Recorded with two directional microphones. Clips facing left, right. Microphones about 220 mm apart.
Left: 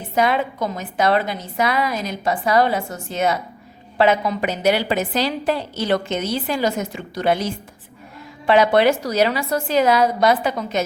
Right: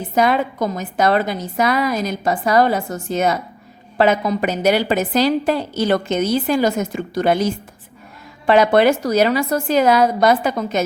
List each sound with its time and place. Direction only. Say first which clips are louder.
0.2 s a woman's voice: right 2 dB; 45° right (ahead or behind)